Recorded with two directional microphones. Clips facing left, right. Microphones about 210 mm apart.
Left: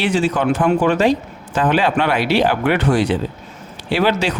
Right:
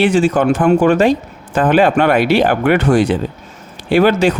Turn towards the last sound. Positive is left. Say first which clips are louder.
# right 6 dB
turn(degrees=-50)  # may be behind; listen again after turning